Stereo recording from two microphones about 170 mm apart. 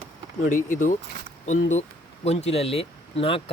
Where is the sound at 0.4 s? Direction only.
50° left (ahead or behind).